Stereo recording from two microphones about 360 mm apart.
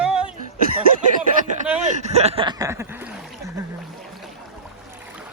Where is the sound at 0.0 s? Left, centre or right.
Centre.